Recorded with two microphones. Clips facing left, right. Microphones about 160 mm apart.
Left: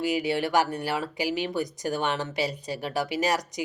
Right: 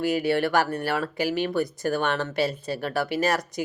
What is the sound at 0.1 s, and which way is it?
Speech, 15° left (ahead or behind).